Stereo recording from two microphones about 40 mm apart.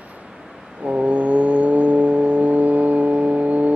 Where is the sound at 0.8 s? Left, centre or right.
Right.